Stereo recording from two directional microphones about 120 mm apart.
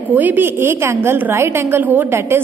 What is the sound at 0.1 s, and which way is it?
A woman's voice, 15° right (ahead or behind).